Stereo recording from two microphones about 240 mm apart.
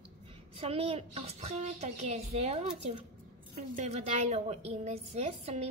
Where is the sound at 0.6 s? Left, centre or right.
Right.